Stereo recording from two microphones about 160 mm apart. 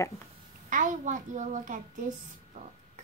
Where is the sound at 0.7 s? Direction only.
50° right (ahead or behind).